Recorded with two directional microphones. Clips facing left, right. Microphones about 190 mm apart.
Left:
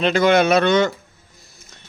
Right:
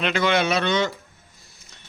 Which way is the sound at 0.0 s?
40° left (ahead or behind).